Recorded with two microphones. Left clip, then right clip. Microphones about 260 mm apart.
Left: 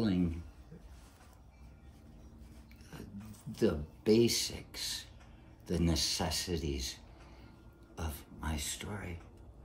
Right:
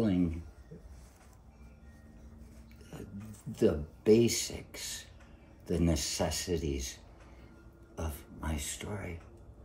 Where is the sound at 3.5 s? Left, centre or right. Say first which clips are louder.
Right 4 dB; centre.